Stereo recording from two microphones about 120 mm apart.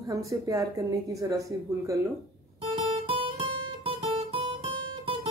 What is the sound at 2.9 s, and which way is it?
Guitar, 55° right (ahead or behind).